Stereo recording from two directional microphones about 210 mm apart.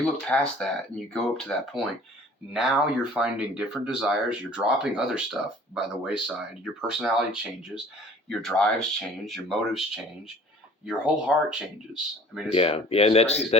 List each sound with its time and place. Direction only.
0.0 s speech: 5° left (ahead or behind)
8.3 s speech: centre (ahead or behind)
12.5 s speech: 30° left (ahead or behind)